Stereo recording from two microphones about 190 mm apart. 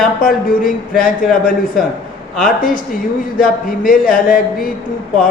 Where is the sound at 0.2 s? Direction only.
50° left (ahead or behind).